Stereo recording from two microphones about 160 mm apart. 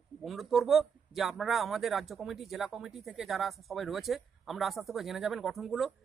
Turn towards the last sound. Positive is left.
turn(degrees=0)  # may be behind; listen again after turning